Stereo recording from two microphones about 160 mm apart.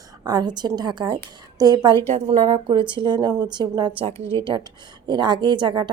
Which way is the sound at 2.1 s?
40° right (ahead or behind).